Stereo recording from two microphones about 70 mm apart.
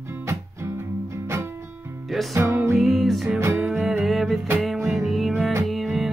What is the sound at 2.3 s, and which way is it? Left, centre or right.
Music, right.